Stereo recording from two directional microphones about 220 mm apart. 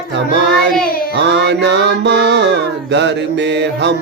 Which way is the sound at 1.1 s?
50° right (ahead or behind).